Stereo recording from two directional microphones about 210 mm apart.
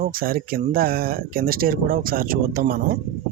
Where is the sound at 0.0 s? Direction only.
45° right (ahead or behind).